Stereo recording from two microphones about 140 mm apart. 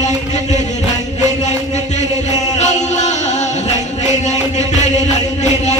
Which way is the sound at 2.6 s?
55° left (ahead or behind).